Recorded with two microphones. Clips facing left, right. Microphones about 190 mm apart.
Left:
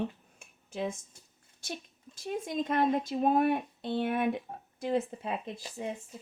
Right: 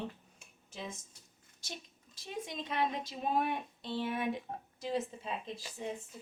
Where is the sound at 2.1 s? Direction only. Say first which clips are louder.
Left 8 dB; 50° left (ahead or behind).